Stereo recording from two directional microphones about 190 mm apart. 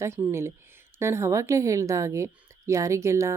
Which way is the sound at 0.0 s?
15° right (ahead or behind).